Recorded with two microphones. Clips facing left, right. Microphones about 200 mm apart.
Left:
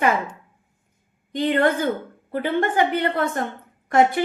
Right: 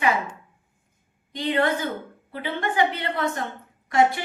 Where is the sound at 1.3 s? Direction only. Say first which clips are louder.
Left 4 dB; 50° left (ahead or behind).